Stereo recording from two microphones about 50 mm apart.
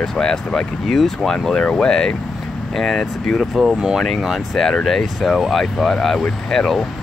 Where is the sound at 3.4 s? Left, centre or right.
Centre.